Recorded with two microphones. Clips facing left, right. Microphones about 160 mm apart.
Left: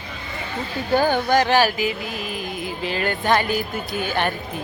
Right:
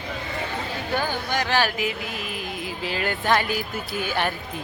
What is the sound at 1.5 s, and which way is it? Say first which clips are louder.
Speech: left 5 dB; 10° left (ahead or behind).